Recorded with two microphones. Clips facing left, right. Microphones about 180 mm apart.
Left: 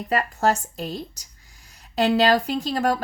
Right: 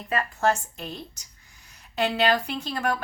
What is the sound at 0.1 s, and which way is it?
Speech, 35° left (ahead or behind).